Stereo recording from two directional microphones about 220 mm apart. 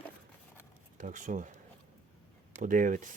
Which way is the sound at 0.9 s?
35° right (ahead or behind).